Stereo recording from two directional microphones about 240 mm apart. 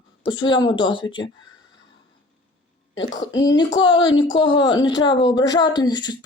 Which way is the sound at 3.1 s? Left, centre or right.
Centre.